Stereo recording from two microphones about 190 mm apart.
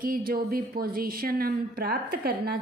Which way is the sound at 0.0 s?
50° right (ahead or behind).